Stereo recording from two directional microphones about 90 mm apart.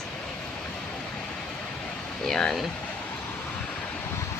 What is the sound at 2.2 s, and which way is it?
Speech, 5° left (ahead or behind).